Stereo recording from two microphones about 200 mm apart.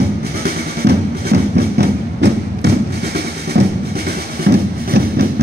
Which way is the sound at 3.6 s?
55° right (ahead or behind).